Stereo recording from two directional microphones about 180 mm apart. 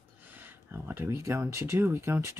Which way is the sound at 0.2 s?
10° right (ahead or behind).